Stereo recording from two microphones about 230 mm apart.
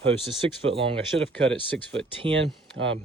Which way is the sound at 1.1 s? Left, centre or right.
Right.